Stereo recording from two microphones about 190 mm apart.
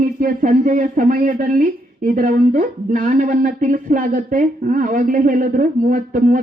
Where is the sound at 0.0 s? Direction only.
45° right (ahead or behind).